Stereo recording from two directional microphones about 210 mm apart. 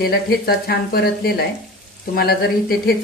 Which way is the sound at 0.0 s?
45° left (ahead or behind).